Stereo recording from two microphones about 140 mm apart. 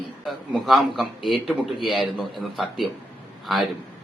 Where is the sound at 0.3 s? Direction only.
Centre (ahead or behind).